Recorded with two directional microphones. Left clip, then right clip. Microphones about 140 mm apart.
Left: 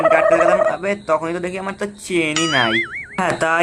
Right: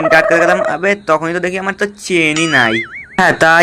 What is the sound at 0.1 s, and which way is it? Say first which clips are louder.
A man's voice: right 7 dB; 30° right (ahead or behind).